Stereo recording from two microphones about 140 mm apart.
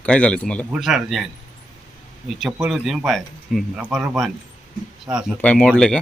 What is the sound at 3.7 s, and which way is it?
Speech, 15° right (ahead or behind).